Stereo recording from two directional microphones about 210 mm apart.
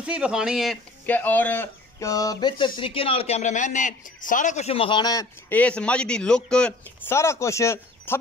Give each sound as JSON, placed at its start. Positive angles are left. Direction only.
{"t": 0.0, "sound": "speech", "side_deg": -5}
{"t": 5.6, "sound": "speech", "side_deg": 5}